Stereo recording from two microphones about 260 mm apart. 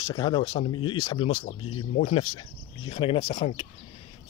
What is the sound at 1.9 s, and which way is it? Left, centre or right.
Speech, left.